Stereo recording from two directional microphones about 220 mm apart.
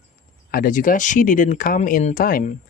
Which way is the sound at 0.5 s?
40° left (ahead or behind).